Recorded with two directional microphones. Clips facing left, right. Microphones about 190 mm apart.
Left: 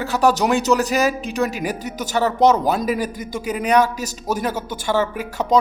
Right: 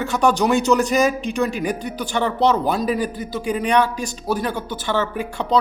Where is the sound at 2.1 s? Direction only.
5° left (ahead or behind).